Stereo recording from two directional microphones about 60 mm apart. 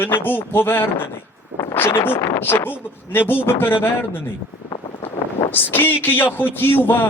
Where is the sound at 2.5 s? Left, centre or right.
Left.